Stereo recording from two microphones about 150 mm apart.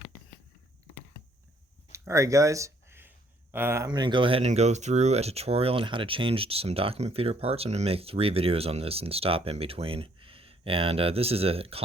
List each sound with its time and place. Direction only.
1.9 s a sound: 20° right (ahead or behind)
3.5 s speech: 15° right (ahead or behind)
3.8 s speech: 30° right (ahead or behind)